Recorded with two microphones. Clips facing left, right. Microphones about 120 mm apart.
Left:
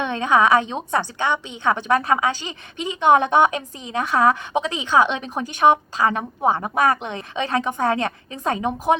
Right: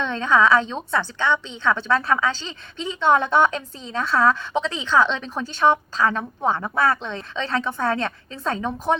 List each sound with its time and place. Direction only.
0.3 s a woman's voice: 15° left (ahead or behind)